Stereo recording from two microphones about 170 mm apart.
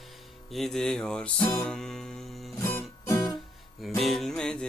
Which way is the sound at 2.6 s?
15° left (ahead or behind).